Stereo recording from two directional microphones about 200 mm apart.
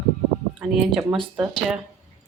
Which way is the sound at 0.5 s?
5° right (ahead or behind).